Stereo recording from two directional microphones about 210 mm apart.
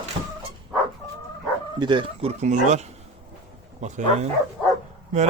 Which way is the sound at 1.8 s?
25° right (ahead or behind).